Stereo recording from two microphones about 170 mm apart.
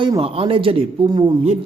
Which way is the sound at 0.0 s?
30° right (ahead or behind).